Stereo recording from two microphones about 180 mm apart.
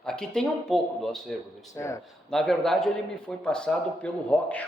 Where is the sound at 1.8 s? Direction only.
15° left (ahead or behind).